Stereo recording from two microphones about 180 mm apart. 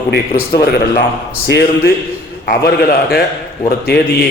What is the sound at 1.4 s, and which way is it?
A man's voice, 65° left (ahead or behind).